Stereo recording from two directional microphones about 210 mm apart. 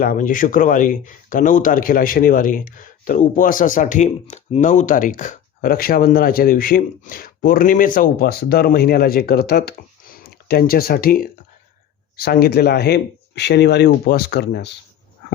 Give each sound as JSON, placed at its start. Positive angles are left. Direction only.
{"t": 0.0, "sound": "a man's voice", "side_deg": 40}